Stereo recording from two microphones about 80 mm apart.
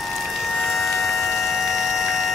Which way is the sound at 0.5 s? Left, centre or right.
Centre.